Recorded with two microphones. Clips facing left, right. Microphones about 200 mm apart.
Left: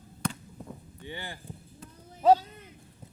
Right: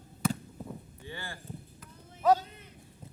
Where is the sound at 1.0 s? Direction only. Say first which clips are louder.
Left 6 dB; 20° left (ahead or behind).